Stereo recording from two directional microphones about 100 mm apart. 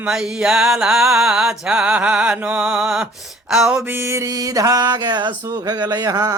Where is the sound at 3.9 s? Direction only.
25° right (ahead or behind).